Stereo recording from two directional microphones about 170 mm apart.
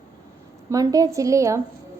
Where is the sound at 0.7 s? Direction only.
20° right (ahead or behind).